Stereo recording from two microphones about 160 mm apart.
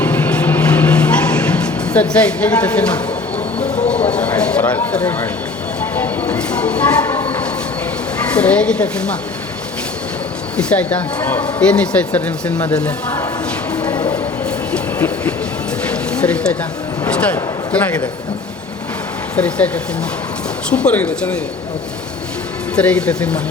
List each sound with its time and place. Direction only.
0.0 s vehicle: 10° left (ahead or behind)
3.6 s train: 45° left (ahead or behind)
4.1 s speech: 10° left (ahead or behind)
5.8 s train: 10° left (ahead or behind)
8.4 s speech: 5° left (ahead or behind)
10.6 s speech: 10° left (ahead or behind)
13.7 s a sound: 25° left (ahead or behind)
14.7 s train: 10° left (ahead or behind)
16.2 s speech: 5° left (ahead or behind)
19.4 s speech: 5° left (ahead or behind)
22.7 s speech: 5° left (ahead or behind)